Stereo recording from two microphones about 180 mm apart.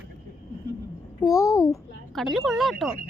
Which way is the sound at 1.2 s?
20° left (ahead or behind).